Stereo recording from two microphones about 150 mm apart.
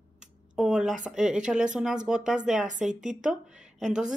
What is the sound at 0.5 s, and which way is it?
A woman's voice, 5° right (ahead or behind).